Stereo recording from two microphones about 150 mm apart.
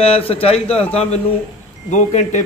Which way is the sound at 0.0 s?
40° left (ahead or behind).